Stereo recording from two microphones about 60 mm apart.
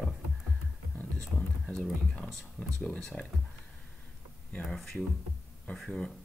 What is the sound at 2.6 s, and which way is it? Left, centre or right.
Speech, centre.